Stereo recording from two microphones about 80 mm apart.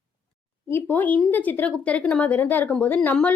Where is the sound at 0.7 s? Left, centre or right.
Left.